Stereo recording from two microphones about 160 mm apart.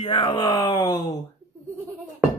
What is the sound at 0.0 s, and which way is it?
Speech, 30° left (ahead or behind).